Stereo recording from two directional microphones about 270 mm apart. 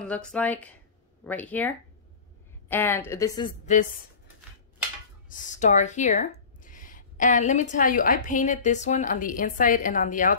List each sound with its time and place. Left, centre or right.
0.0 s a woman's voice: centre
3.7 s a woman's voice: left
5.3 s a woman's voice: left